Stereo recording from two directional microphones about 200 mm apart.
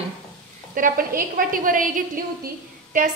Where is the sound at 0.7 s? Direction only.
45° right (ahead or behind).